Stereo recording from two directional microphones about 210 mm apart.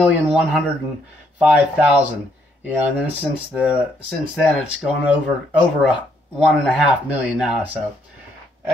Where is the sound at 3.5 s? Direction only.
Centre (ahead or behind).